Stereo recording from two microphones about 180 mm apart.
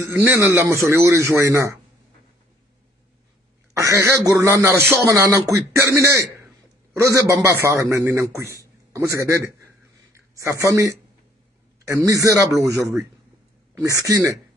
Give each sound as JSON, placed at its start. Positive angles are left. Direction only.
{"t": 0.0, "sound": "speech", "side_deg": -15}
{"t": 3.7, "sound": "speech", "side_deg": -20}